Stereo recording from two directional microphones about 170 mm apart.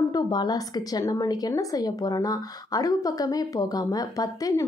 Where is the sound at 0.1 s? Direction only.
25° left (ahead or behind).